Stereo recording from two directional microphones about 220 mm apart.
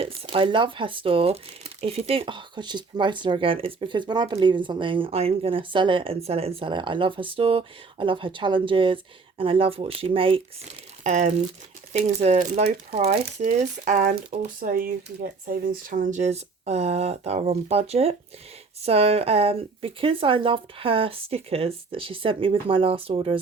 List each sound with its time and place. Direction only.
0.0 s speech: 25° right (ahead or behind)